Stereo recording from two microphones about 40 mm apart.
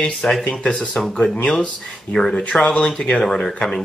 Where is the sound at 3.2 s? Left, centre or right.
Centre.